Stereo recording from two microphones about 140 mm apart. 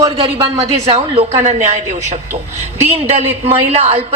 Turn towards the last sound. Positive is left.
turn(degrees=-45)  # may be behind; listen again after turning